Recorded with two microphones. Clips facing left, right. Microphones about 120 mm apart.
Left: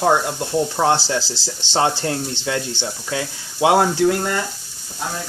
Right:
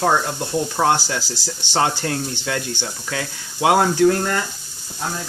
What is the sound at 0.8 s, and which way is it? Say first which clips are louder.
Speech: right 1 dB; 30° left (ahead or behind).